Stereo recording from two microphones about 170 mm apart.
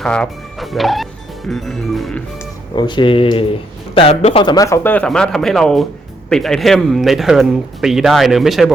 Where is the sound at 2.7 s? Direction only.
25° left (ahead or behind).